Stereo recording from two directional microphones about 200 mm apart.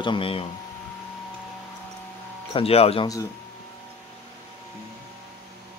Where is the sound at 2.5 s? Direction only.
30° left (ahead or behind).